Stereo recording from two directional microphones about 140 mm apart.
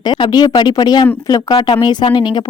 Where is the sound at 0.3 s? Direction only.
30° left (ahead or behind).